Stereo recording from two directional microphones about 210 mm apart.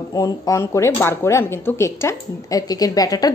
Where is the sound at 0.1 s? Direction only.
15° left (ahead or behind).